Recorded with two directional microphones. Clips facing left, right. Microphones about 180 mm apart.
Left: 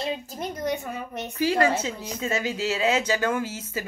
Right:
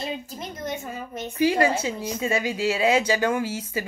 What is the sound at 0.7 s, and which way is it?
Speech, 65° left (ahead or behind).